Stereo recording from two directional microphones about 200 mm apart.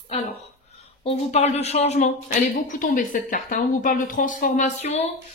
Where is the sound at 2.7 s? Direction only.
45° left (ahead or behind).